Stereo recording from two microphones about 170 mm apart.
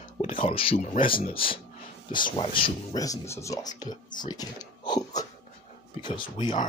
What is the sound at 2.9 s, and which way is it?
Speech, 20° left (ahead or behind).